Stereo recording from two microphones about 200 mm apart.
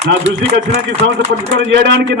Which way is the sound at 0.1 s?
60° right (ahead or behind).